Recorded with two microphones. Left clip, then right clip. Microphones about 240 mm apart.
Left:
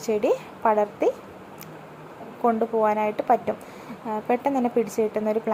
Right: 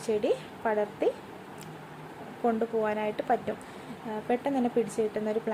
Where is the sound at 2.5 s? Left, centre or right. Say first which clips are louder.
Left 7 dB; centre.